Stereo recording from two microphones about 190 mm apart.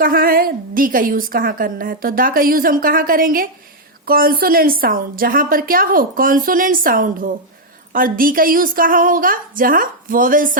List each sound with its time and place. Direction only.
0.0 s a woman's voice: 50° right (ahead or behind)